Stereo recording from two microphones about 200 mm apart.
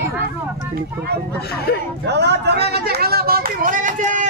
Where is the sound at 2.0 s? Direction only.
55° right (ahead or behind).